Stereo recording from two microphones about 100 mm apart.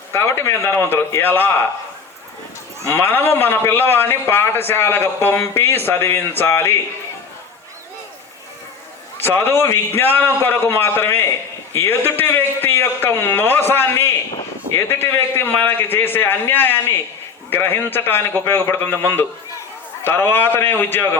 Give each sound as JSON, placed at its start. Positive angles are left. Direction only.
{"t": 0.1, "sound": "a man's voice", "side_deg": 25}
{"t": 2.9, "sound": "a man's voice", "side_deg": 25}
{"t": 9.1, "sound": "a man's voice", "side_deg": 20}